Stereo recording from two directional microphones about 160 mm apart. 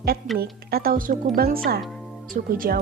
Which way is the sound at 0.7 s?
65° right (ahead or behind).